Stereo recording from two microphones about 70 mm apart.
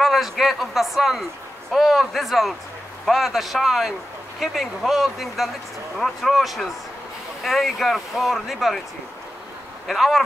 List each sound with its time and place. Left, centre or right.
0.0 s speech: centre
9.8 s speech: centre